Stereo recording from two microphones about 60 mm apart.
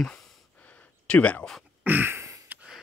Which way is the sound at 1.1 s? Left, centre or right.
Left.